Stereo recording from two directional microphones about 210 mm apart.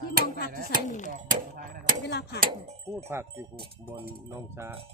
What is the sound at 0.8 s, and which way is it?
Speech, 35° left (ahead or behind).